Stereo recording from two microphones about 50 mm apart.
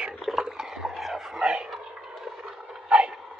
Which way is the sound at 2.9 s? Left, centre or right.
Centre.